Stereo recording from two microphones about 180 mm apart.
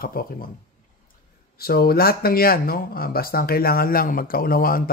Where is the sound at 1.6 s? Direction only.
55° left (ahead or behind).